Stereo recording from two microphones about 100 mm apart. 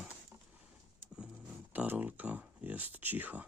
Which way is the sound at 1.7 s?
15° right (ahead or behind).